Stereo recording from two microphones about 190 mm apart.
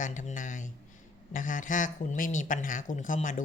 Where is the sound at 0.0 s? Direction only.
40° left (ahead or behind).